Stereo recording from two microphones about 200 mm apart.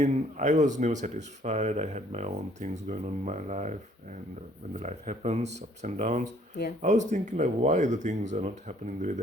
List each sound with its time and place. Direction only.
0.0 s speech: 35° right (ahead or behind)